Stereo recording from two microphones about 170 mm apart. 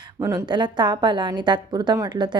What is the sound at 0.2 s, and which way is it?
Speech, 15° right (ahead or behind).